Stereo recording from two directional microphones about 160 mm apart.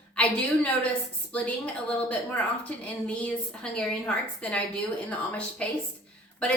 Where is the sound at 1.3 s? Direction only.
10° left (ahead or behind).